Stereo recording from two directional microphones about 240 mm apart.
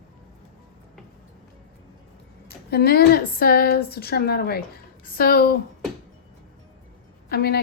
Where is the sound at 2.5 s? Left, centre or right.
Left.